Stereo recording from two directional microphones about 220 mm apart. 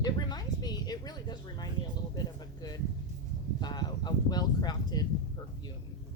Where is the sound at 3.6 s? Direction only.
20° left (ahead or behind).